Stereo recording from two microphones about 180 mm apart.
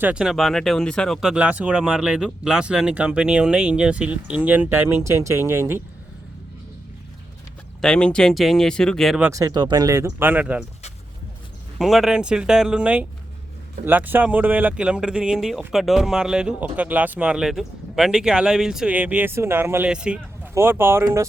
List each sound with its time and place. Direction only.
0.0 s speech: 5° right (ahead or behind)
7.8 s speech: 5° left (ahead or behind)
9.2 s speech: 20° right (ahead or behind)
11.8 s speech: centre (ahead or behind)